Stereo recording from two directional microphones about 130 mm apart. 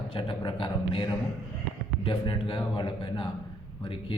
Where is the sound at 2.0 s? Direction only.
40° left (ahead or behind).